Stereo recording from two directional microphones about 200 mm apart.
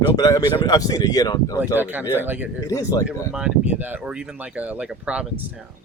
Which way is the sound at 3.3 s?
5° right (ahead or behind).